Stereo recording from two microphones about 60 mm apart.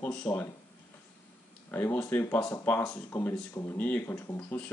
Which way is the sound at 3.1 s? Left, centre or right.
Left.